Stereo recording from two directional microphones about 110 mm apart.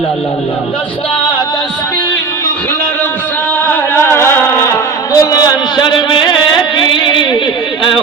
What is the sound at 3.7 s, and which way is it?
Music, 20° left (ahead or behind).